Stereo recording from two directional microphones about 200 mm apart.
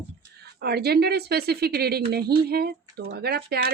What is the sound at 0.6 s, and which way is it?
Speech, 55° right (ahead or behind).